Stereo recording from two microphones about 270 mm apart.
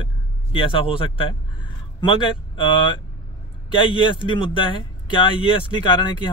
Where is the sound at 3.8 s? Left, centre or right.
Centre.